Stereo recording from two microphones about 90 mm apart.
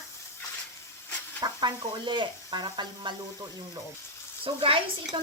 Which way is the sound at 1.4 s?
55° right (ahead or behind).